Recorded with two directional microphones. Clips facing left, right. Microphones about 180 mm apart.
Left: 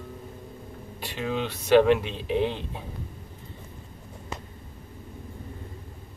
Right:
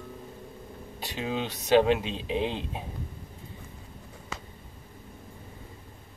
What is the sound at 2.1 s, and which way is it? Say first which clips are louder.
Speech: left 3 dB; 15° right (ahead or behind).